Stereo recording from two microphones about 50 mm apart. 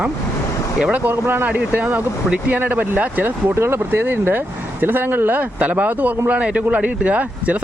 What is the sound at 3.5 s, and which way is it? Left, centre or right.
Speech, right.